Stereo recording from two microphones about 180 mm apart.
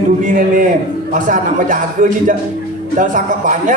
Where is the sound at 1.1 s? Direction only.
45° right (ahead or behind).